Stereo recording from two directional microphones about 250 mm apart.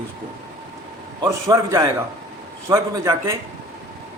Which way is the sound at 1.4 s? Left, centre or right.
Centre.